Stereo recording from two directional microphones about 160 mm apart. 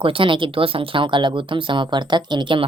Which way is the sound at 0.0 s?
35° right (ahead or behind).